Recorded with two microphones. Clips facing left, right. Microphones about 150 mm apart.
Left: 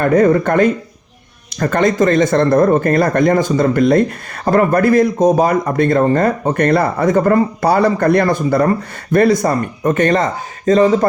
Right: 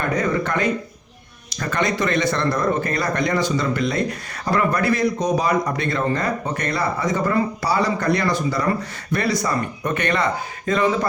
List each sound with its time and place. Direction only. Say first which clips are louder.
0.0 s a man's voice: left 10 dB; 50° left (ahead or behind)